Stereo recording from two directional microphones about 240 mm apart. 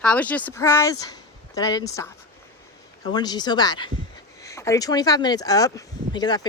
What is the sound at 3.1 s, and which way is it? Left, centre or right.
A woman's voice, centre.